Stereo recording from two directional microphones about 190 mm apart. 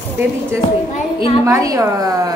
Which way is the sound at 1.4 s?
15° right (ahead or behind).